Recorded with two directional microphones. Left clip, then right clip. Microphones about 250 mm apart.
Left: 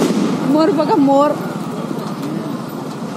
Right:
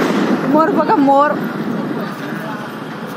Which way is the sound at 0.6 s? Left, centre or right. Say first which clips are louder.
Right 1 dB; right.